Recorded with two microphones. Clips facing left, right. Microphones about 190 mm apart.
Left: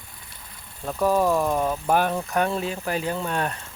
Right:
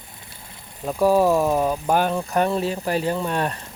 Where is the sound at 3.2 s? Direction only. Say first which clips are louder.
Right 3 dB; 15° right (ahead or behind).